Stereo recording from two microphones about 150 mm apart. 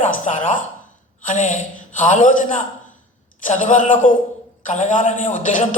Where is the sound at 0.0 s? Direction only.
55° left (ahead or behind).